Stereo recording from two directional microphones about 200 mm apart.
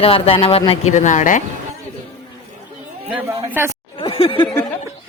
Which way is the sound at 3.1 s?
10° right (ahead or behind).